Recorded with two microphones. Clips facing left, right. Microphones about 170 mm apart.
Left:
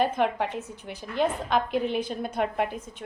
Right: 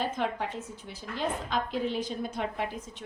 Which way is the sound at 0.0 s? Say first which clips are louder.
Left 6 dB; 65° left (ahead or behind).